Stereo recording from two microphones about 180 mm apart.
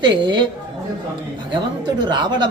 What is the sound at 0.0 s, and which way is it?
Speech, 25° right (ahead or behind).